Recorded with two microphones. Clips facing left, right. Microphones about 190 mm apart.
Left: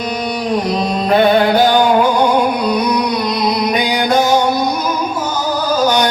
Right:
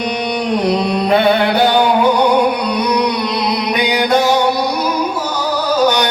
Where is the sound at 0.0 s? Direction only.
65° right (ahead or behind).